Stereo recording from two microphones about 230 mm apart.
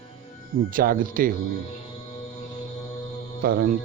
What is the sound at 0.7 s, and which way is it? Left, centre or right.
Speech, right.